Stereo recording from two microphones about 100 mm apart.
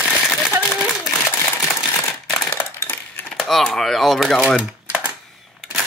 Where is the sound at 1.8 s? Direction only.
35° left (ahead or behind).